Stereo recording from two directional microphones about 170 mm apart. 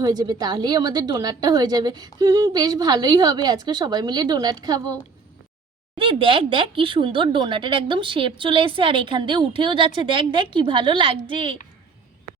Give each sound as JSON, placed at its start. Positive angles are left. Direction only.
{"t": 0.0, "sound": "speech", "side_deg": -25}
{"t": 6.0, "sound": "speech", "side_deg": -30}